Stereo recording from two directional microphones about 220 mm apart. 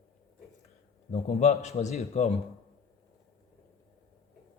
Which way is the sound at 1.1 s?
30° left (ahead or behind).